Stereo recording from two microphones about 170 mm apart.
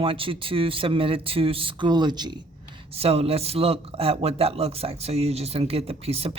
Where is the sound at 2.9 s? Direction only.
35° right (ahead or behind).